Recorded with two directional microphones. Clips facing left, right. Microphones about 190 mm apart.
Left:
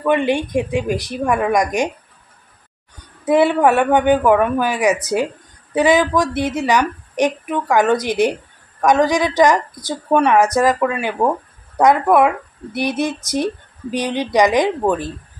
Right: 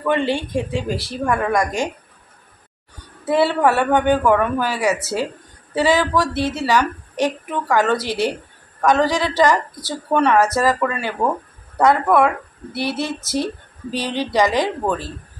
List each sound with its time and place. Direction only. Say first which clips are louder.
0.0 s a woman's voice: left 3 dB; 15° left (ahead or behind)
3.3 s a woman's voice: left 3 dB; 15° left (ahead or behind)